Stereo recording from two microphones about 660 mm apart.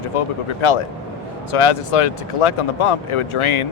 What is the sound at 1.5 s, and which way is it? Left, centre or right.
Speech, left.